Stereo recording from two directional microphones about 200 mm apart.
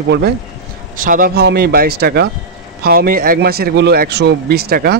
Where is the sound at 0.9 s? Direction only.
40° right (ahead or behind).